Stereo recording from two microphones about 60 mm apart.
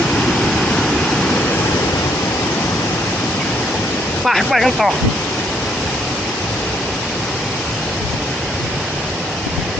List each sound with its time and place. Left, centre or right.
4.3 s speech: centre